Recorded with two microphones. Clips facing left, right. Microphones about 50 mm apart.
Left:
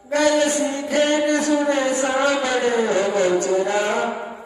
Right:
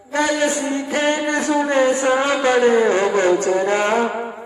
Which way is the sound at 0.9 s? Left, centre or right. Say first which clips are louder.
Left 2 dB; right.